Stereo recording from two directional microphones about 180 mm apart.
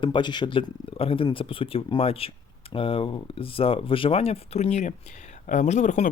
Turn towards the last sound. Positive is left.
turn(degrees=40)  # may be behind; listen again after turning